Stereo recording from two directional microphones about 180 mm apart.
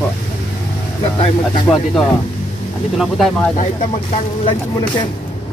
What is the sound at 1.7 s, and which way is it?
Speech, centre (ahead or behind).